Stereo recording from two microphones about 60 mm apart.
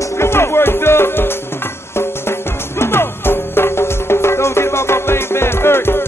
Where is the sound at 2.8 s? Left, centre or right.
Left.